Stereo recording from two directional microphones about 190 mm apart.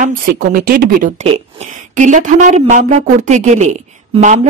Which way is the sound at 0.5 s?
50° right (ahead or behind).